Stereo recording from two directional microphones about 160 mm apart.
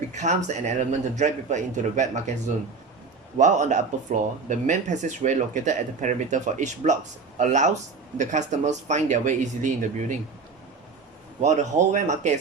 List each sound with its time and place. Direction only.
0.1 s speech: 45° right (ahead or behind)
3.3 s speech: 50° right (ahead or behind)
11.3 s speech: 45° right (ahead or behind)